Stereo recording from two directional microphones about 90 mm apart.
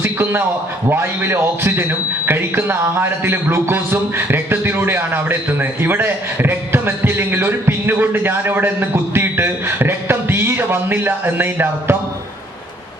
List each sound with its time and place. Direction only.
0.0 s a man's voice: 25° right (ahead or behind)